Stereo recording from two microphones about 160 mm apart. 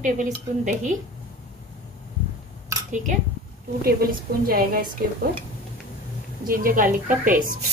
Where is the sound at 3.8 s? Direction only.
70° right (ahead or behind).